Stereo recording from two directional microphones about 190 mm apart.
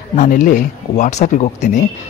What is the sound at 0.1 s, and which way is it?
Speech, 40° left (ahead or behind).